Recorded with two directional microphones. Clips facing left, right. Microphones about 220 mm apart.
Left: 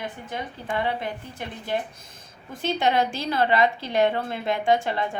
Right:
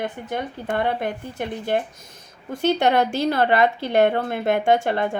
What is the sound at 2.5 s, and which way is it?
A woman's voice, 65° right (ahead or behind).